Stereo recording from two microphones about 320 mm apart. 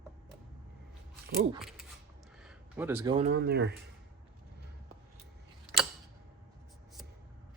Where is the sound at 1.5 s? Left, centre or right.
Centre; by 3.7 s right.